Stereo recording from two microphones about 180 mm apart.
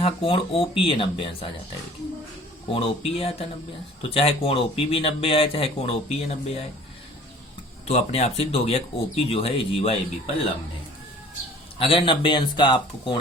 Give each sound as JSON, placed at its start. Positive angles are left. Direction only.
{"t": 0.0, "sound": "speech", "side_deg": 30}
{"t": 2.7, "sound": "speech", "side_deg": 30}
{"t": 7.9, "sound": "speech", "side_deg": 35}
{"t": 11.8, "sound": "speech", "side_deg": 30}